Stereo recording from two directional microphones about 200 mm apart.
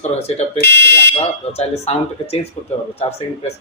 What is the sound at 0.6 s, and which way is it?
Fire alarm, 60° left (ahead or behind).